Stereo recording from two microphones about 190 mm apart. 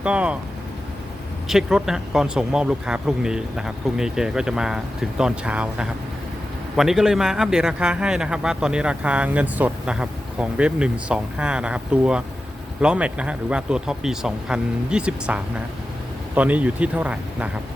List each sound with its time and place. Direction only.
0.0 s speech: 5° right (ahead or behind)
1.5 s speech: 5° right (ahead or behind)